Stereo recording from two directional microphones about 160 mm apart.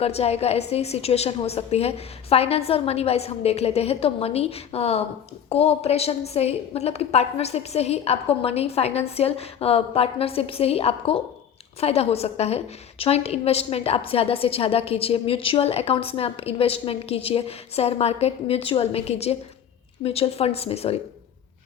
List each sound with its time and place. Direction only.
0.0 s a woman's voice: 40° left (ahead or behind)